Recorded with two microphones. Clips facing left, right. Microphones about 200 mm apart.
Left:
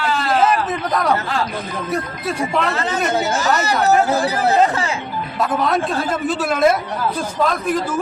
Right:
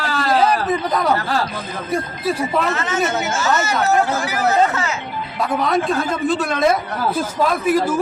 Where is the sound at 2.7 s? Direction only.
35° left (ahead or behind).